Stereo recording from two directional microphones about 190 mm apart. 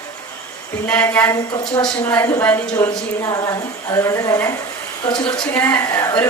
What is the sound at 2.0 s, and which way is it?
A woman's voice, 10° left (ahead or behind).